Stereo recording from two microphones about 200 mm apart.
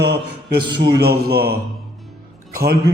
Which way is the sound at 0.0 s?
55° right (ahead or behind).